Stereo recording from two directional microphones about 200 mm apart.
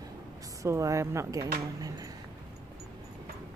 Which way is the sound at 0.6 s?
15° right (ahead or behind).